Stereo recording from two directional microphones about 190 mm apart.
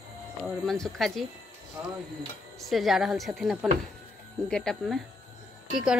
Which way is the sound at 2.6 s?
Centre (ahead or behind).